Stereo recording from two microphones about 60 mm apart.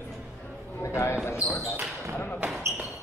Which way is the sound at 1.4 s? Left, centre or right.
Centre.